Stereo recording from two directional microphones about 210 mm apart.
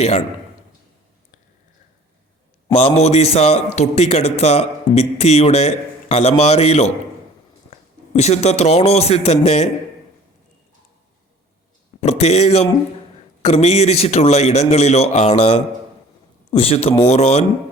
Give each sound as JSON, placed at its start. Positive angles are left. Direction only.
{"t": 2.7, "sound": "a man's voice", "side_deg": 30}
{"t": 11.9, "sound": "a man's voice", "side_deg": 30}